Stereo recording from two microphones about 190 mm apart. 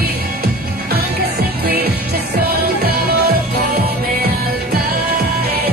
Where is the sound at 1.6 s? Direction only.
55° right (ahead or behind).